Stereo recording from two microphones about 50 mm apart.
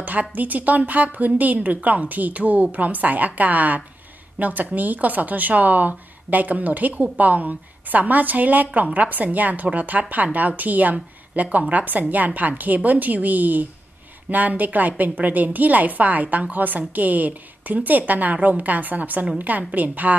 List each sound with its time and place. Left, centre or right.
0.0 s a woman's voice: right